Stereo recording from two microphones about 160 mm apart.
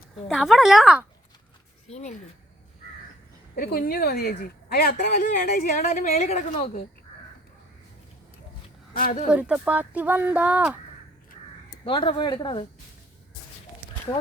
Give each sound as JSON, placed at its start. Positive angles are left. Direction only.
{"t": 0.3, "sound": "a woman's voice", "side_deg": 0}
{"t": 1.9, "sound": "a woman's voice", "side_deg": 45}
{"t": 3.5, "sound": "speech", "side_deg": 70}
{"t": 6.1, "sound": "a woman's voice", "side_deg": 45}
{"t": 8.9, "sound": "speech", "side_deg": 60}
{"t": 9.3, "sound": "speech", "side_deg": -5}
{"t": 11.9, "sound": "speech", "side_deg": 30}